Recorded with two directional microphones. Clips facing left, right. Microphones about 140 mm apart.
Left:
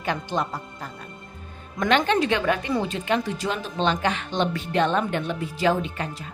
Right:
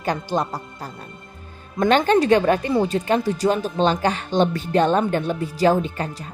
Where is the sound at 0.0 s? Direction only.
35° right (ahead or behind).